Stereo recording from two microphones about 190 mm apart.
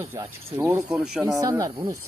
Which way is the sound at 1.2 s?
20° right (ahead or behind).